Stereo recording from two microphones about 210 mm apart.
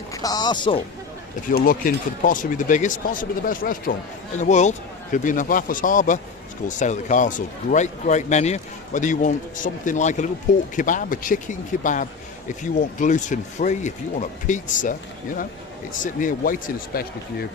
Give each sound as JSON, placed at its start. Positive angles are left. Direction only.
{"t": 0.1, "sound": "speech", "side_deg": 15}
{"t": 1.5, "sound": "speech", "side_deg": 45}